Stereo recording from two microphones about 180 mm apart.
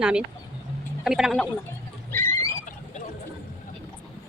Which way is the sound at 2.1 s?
10° left (ahead or behind).